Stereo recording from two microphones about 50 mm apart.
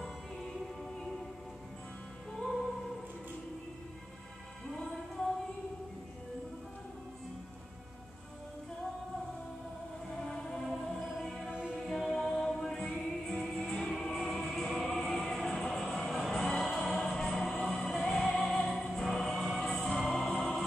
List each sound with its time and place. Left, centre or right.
10.2 s music: centre
13.9 s music: centre
18.3 s music: left
18.7 s music: centre